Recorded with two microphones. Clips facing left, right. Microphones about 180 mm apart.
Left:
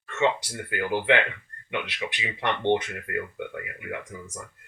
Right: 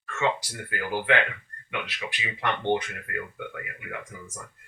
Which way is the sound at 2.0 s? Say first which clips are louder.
Even; 20° left (ahead or behind).